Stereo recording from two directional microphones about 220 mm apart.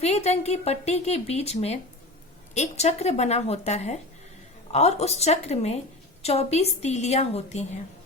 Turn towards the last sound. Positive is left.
turn(degrees=30)  # may be behind; listen again after turning